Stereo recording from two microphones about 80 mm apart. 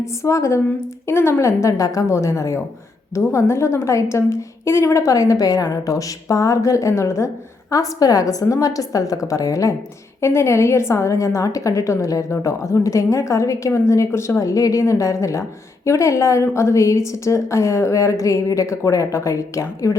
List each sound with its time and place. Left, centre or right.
0.2 s a woman's voice: left